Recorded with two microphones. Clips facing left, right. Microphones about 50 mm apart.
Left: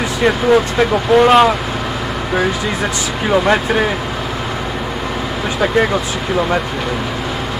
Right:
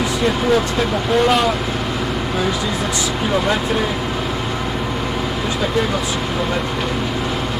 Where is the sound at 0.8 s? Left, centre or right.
Left.